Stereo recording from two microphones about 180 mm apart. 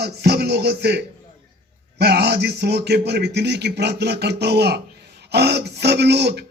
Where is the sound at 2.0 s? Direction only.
65° right (ahead or behind).